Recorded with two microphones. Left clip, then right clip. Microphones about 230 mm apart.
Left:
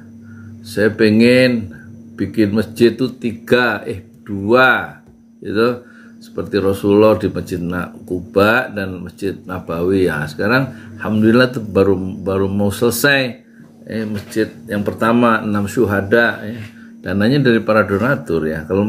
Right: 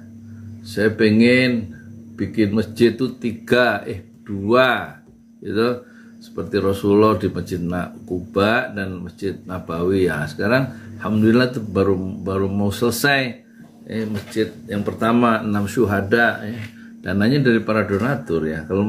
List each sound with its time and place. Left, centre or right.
0.7 s speech: centre